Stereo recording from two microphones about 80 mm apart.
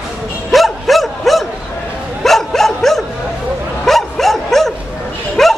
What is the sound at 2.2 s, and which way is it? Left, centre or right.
Dog, centre.